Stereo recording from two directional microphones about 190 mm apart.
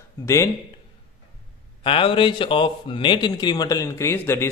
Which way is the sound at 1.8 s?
25° left (ahead or behind).